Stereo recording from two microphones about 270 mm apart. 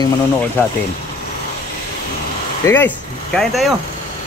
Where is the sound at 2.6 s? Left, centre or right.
Centre.